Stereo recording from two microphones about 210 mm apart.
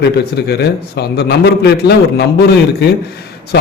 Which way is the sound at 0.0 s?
50° left (ahead or behind).